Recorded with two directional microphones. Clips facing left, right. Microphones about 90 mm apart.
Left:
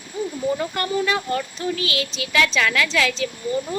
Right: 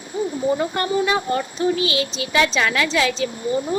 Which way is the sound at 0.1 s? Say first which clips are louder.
Right 3 dB; 20° right (ahead or behind).